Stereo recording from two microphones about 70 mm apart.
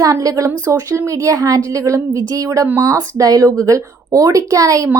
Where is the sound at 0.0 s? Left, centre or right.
Right.